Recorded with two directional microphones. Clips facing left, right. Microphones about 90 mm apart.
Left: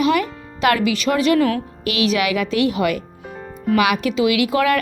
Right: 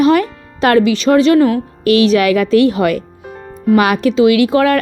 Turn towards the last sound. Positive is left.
turn(degrees=-35)  # may be behind; listen again after turning